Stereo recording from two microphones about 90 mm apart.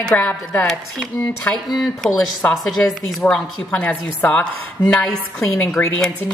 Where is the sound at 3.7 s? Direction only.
20° left (ahead or behind).